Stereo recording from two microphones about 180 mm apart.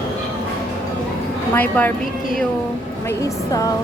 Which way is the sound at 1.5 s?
10° left (ahead or behind).